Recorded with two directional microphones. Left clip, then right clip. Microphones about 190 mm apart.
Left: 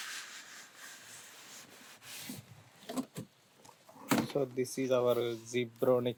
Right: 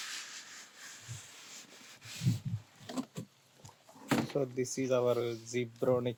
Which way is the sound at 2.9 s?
25° left (ahead or behind).